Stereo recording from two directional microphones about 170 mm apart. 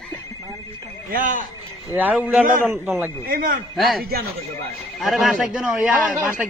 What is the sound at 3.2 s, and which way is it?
Speech, 55° right (ahead or behind).